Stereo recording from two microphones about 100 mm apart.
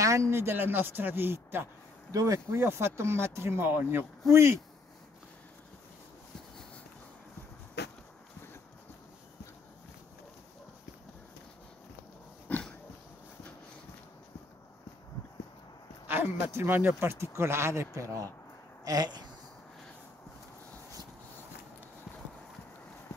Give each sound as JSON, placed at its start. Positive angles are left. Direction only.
{"t": 0.3, "sound": "speech", "side_deg": -25}
{"t": 2.1, "sound": "speech", "side_deg": -35}
{"t": 12.4, "sound": "dog", "side_deg": 15}
{"t": 16.1, "sound": "speech", "side_deg": -20}
{"t": 18.9, "sound": "a sound", "side_deg": -45}